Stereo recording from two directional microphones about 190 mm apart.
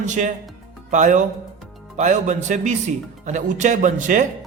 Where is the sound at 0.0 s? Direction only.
40° right (ahead or behind).